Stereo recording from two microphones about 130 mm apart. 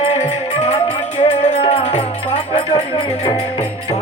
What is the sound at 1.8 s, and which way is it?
Music, 65° left (ahead or behind).